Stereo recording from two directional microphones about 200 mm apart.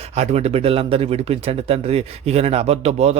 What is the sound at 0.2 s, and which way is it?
Speech, 35° right (ahead or behind).